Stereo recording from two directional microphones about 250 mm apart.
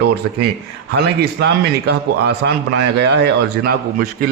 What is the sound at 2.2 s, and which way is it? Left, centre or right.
A man's voice, right.